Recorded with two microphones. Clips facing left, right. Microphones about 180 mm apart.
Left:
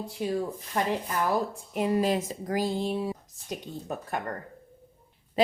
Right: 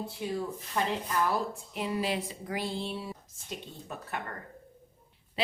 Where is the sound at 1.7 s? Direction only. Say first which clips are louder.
Left 7 dB; 45° left (ahead or behind).